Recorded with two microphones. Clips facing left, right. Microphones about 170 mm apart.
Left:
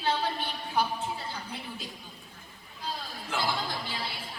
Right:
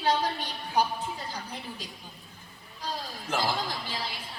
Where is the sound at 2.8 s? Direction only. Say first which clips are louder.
Right 2 dB; 40° right (ahead or behind).